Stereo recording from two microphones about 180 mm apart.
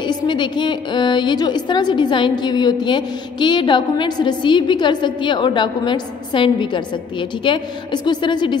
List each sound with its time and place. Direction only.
0.0 s a woman's voice: 25° left (ahead or behind)